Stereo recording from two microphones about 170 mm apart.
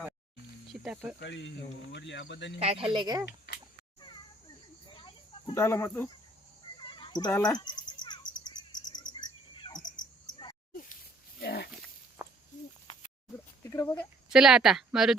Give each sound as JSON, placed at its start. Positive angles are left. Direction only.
{"t": 0.7, "sound": "speech", "side_deg": 0}
{"t": 1.2, "sound": "speech", "side_deg": 90}
{"t": 2.6, "sound": "speech", "side_deg": -35}
{"t": 3.2, "sound": "speech", "side_deg": 75}
{"t": 4.9, "sound": "cricket", "side_deg": 30}
{"t": 5.5, "sound": "speech", "side_deg": 15}
{"t": 6.8, "sound": "a sound", "side_deg": 30}
{"t": 7.3, "sound": "speech", "side_deg": 10}
{"t": 7.5, "sound": "cricket", "side_deg": 25}
{"t": 9.6, "sound": "cricket", "side_deg": 30}
{"t": 11.3, "sound": "pig", "side_deg": 65}
{"t": 13.7, "sound": "speech", "side_deg": 15}
{"t": 14.3, "sound": "a woman's voice", "side_deg": -5}